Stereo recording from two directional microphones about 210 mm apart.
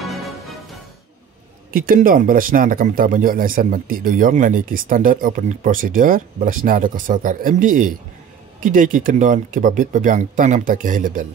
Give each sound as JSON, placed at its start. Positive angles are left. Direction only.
{"t": 0.0, "sound": "music", "side_deg": 0}
{"t": 1.7, "sound": "speech", "side_deg": -40}